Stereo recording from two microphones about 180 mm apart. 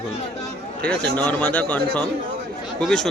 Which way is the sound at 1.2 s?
5° left (ahead or behind).